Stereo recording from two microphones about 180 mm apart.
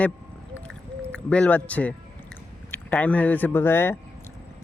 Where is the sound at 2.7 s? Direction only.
10° left (ahead or behind).